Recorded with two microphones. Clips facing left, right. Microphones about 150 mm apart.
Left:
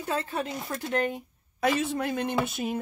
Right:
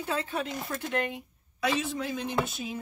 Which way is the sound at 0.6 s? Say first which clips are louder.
Left 3 dB; 40° left (ahead or behind).